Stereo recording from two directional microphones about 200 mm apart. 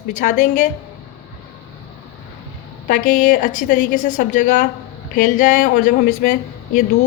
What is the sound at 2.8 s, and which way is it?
A woman's voice, 40° left (ahead or behind).